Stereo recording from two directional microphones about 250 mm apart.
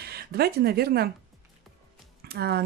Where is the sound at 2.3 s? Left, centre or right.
Right.